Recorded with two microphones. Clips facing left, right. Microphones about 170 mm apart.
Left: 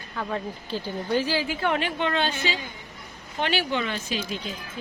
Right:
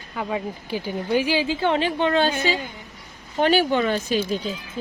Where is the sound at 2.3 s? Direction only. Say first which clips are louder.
Right 6 dB; 50° right (ahead or behind).